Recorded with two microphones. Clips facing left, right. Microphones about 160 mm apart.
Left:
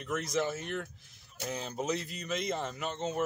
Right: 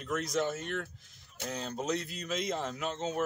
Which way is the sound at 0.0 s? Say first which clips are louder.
Even; centre (ahead or behind).